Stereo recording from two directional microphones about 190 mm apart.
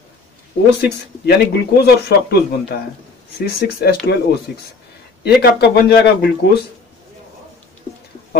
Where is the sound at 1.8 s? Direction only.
60° left (ahead or behind).